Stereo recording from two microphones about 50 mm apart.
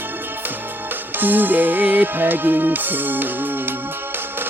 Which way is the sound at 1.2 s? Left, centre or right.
Right.